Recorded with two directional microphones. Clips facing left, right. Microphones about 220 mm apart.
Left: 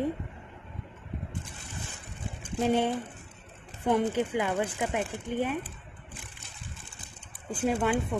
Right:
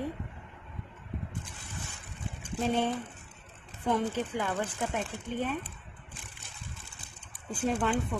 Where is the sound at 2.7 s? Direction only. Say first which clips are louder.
Left 3 dB; 15° left (ahead or behind).